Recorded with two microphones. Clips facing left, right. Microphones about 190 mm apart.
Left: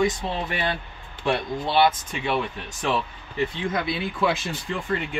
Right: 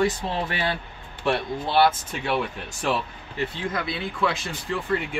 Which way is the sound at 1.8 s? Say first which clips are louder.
Right 1 dB; 5° right (ahead or behind).